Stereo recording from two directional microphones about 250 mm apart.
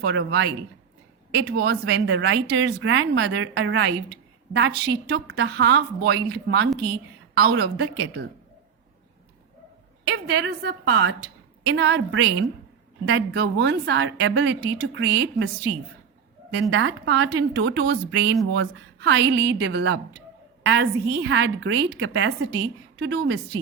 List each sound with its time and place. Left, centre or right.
0.0 s a woman's voice: right
10.1 s a woman's voice: right
16.6 s a woman's voice: right